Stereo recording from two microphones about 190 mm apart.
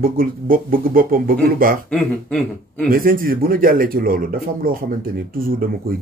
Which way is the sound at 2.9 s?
50° right (ahead or behind).